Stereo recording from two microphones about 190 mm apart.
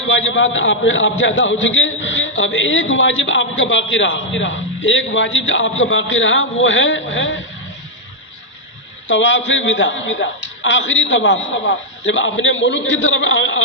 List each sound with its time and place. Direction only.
0.0 s a man's voice: 80° left
9.0 s a man's voice: 80° left